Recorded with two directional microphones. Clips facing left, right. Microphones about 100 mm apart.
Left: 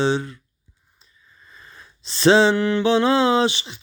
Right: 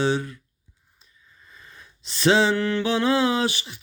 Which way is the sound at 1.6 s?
35° left (ahead or behind).